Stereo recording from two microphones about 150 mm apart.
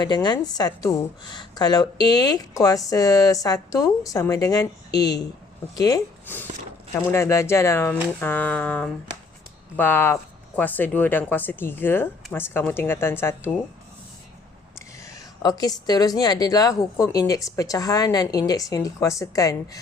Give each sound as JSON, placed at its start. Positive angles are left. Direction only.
{"t": 0.0, "sound": "a woman's voice", "side_deg": 30}
{"t": 14.8, "sound": "a woman's voice", "side_deg": 20}